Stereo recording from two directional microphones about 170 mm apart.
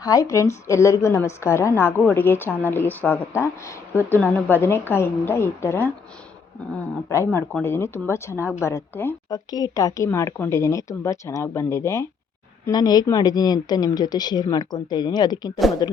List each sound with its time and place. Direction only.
0.0 s a woman's voice: 20° left (ahead or behind)